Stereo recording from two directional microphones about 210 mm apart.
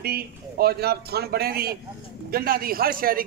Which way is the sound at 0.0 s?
45° right (ahead or behind).